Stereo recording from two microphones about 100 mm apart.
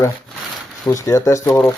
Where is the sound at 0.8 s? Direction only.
35° left (ahead or behind).